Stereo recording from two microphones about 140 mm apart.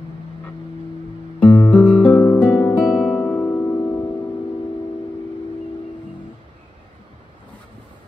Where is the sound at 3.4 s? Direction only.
15° left (ahead or behind).